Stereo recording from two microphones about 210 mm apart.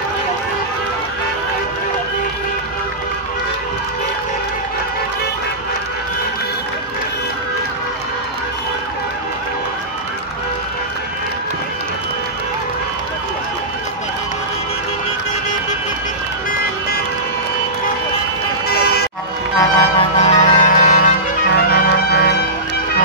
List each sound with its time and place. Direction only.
19.6 s music: 30° left (ahead or behind); by 22.4 s 50° left (ahead or behind)